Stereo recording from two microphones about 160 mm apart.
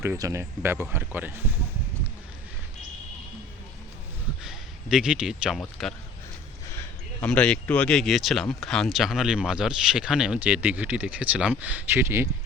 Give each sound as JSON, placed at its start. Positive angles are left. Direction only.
{"t": 0.0, "sound": "speech", "side_deg": -15}
{"t": 4.4, "sound": "speech", "side_deg": -5}